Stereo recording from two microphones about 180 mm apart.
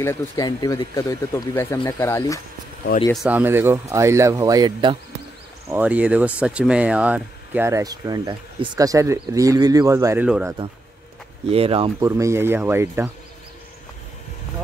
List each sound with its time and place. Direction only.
0.0 s speech: 15° left (ahead or behind)
3.3 s speech: 10° right (ahead or behind)
5.7 s speech: 10° right (ahead or behind)
11.4 s speech: 35° right (ahead or behind)
12.0 s speech: 15° right (ahead or behind)